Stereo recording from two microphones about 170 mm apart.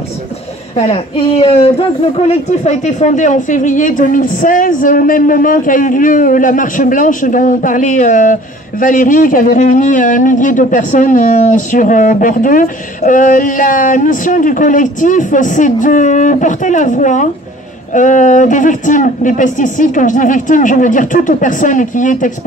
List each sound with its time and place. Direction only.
0.7 s speech: 35° left (ahead or behind)